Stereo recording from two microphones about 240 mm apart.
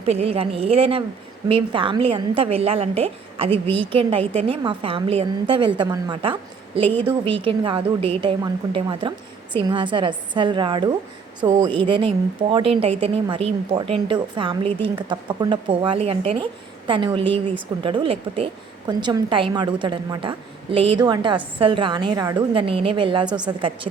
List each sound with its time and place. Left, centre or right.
0.0 s a woman's voice: right